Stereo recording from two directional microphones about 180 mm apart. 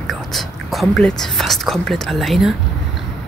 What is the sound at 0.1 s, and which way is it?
Speech, centre (ahead or behind).